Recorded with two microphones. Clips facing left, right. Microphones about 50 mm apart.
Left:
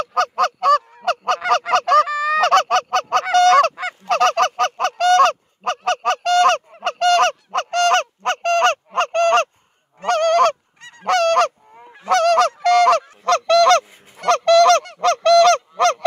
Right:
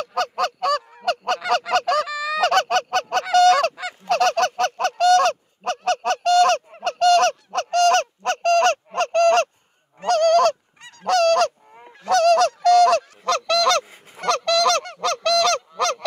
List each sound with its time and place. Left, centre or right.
0.0 s honk: left
4.1 s goose: left
15.0 s honk: left